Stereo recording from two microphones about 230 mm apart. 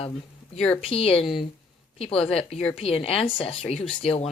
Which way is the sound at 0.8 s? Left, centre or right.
Left.